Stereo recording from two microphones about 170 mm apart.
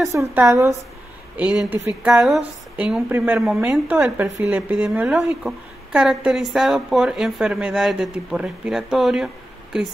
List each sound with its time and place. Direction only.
0.1 s a woman's voice: 15° right (ahead or behind)